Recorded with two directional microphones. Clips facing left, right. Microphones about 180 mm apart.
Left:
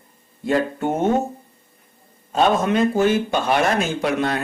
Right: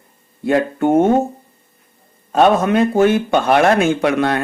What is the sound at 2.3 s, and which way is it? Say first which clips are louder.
Speech: right 5 dB; 60° right (ahead or behind).